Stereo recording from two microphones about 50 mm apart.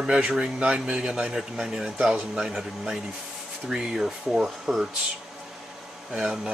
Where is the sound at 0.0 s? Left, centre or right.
Centre.